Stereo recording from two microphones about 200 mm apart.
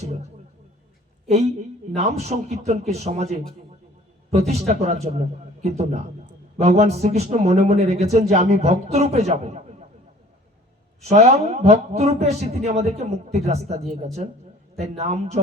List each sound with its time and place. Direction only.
0.0 s a sound: 35° right (ahead or behind)
2.0 s a man's voice: 35° right (ahead or behind)
11.0 s a man's voice: 35° right (ahead or behind)